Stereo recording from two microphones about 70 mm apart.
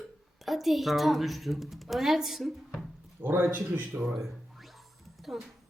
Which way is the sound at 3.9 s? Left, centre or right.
Centre.